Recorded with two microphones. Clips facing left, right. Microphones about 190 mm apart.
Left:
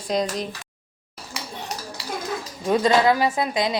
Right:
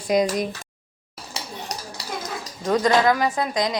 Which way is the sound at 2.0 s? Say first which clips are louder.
Left 1 dB; 40° right (ahead or behind).